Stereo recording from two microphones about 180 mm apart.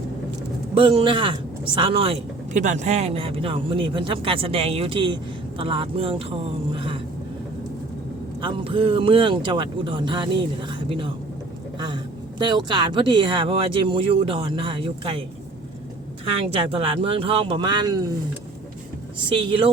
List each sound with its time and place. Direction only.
0.7 s speech: 30° right (ahead or behind)
8.4 s speech: 30° right (ahead or behind)
12.4 s speech: 25° right (ahead or behind)
16.7 s speech: 30° right (ahead or behind)
19.3 s speech: 30° right (ahead or behind)